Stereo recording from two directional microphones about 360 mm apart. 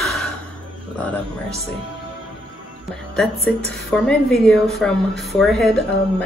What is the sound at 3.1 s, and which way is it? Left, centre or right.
Speech, centre.